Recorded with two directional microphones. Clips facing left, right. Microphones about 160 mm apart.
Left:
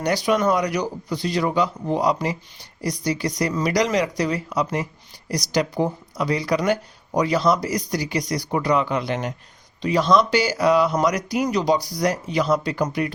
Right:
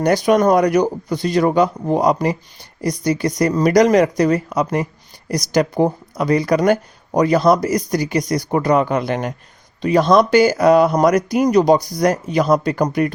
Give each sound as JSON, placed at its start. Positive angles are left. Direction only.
{"t": 0.0, "sound": "speech", "side_deg": -50}